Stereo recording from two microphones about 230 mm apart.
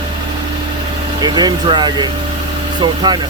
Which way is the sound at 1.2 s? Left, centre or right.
Centre.